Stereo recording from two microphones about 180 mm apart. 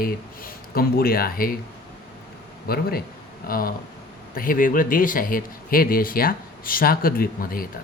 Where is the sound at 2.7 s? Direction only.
55° left (ahead or behind).